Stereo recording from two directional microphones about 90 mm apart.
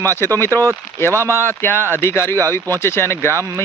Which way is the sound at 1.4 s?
25° left (ahead or behind).